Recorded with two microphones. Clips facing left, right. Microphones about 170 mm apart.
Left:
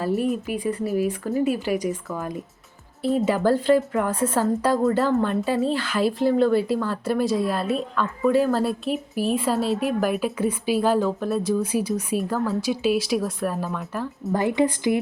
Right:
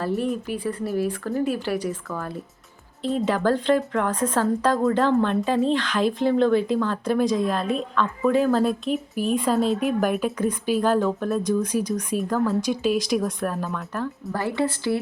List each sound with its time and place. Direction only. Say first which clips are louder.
0.0 s a woman's voice: left 2 dB; 5° left (ahead or behind)
14.3 s speech: left 4 dB; 15° left (ahead or behind)